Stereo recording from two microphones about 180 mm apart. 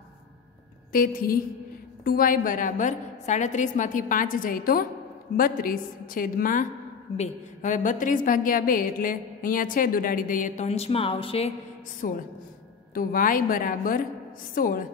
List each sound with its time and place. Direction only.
0.9 s a woman's voice: 55° left (ahead or behind); by 11.5 s 30° left (ahead or behind)
12.0 s a woman's voice: 55° left (ahead or behind)